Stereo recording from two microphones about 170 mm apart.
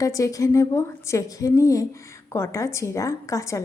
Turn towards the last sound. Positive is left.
turn(degrees=20)  # may be behind; listen again after turning